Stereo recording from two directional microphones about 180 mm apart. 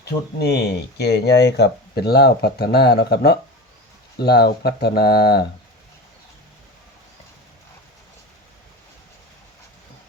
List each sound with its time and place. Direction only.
0.0 s speech: 65° left (ahead or behind)